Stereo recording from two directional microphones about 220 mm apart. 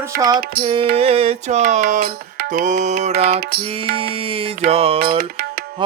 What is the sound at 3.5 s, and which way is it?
Music, 45° right (ahead or behind).